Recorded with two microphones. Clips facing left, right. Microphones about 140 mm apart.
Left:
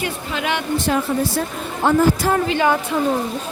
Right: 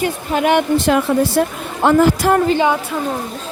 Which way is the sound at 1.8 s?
85° right.